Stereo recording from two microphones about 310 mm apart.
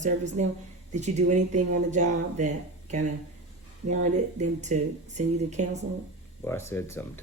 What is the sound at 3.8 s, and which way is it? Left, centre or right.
Speech, right.